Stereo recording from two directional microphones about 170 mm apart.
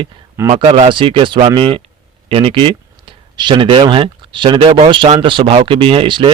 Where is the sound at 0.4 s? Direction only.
35° right (ahead or behind).